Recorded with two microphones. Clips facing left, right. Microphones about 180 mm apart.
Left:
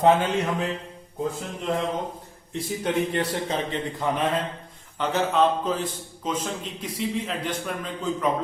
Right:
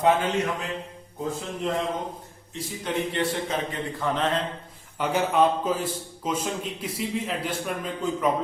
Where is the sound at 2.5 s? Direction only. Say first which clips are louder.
Left 4 dB; 55° left (ahead or behind).